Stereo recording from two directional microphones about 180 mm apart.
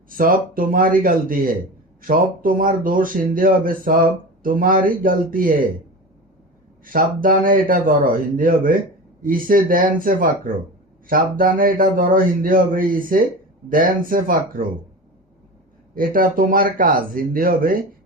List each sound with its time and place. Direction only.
0.1 s speech: 50° right (ahead or behind)
6.8 s speech: 50° right (ahead or behind)
16.0 s speech: 50° right (ahead or behind)